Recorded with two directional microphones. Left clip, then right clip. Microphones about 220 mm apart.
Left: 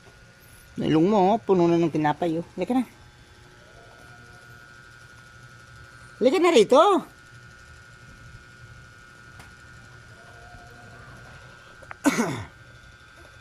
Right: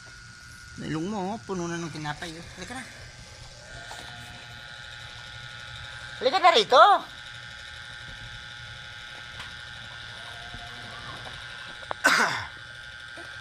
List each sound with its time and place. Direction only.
0.8 s speech: 50° left (ahead or behind)
6.2 s speech: 50° left (ahead or behind)
12.0 s throat clearing: 45° left (ahead or behind)